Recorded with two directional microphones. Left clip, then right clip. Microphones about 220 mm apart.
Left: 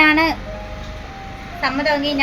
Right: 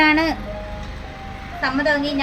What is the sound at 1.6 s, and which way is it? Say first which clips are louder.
Speech: left 1 dB; 15° right (ahead or behind).